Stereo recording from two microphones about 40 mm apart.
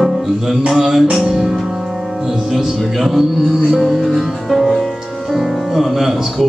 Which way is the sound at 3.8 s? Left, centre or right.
Centre.